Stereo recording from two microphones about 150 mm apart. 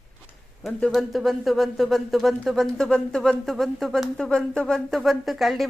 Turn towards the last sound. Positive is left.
turn(degrees=0)  # may be behind; listen again after turning